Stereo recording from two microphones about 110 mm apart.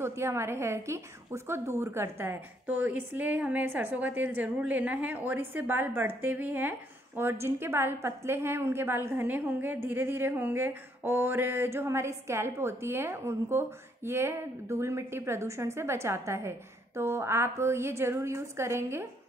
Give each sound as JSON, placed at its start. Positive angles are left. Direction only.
{"t": 0.0, "sound": "a woman's voice", "side_deg": -25}